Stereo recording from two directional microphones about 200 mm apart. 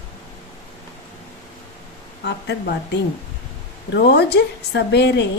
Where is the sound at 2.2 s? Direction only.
60° left (ahead or behind).